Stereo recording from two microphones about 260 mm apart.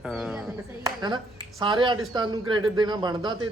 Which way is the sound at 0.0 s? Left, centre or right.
Centre.